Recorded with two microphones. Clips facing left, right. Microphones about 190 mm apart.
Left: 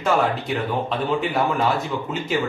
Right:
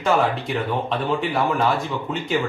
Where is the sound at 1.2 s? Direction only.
Centre (ahead or behind).